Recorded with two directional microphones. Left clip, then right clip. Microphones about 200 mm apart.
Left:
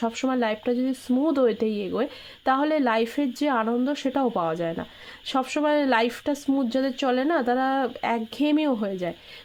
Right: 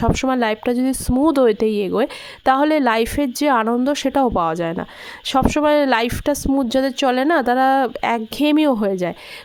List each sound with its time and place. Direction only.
0.0 s speech: 45° right (ahead or behind)